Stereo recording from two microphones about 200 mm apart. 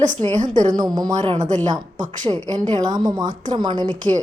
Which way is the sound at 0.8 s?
20° right (ahead or behind).